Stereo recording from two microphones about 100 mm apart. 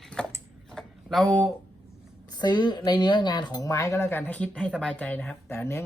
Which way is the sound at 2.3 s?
45° left (ahead or behind).